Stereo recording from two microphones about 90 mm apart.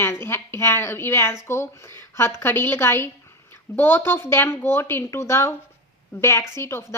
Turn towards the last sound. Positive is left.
turn(degrees=30)  # may be behind; listen again after turning